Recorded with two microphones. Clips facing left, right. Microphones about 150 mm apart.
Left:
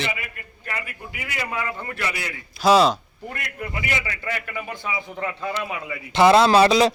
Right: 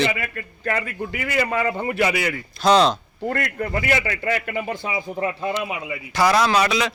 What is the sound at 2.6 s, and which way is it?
Speech, 5° left (ahead or behind).